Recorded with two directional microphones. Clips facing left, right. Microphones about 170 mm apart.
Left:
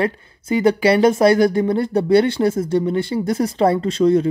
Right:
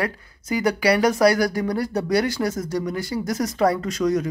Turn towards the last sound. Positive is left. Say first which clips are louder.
# left 7 dB
turn(degrees=30)  # may be behind; listen again after turning